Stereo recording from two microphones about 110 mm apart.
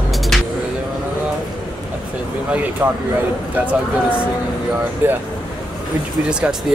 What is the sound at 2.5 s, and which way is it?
Speech, 15° right (ahead or behind).